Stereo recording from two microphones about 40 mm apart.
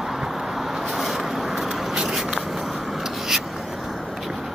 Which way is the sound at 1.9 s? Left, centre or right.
Centre.